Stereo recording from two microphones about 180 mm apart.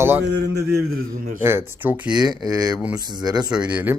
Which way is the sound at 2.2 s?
20° right (ahead or behind).